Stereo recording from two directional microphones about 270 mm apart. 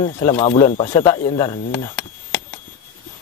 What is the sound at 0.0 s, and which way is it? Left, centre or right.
Speech, centre.